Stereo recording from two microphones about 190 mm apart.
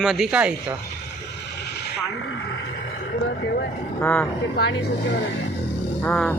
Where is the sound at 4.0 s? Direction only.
10° left (ahead or behind).